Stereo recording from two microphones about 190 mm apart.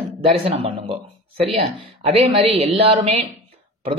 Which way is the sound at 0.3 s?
30° right (ahead or behind).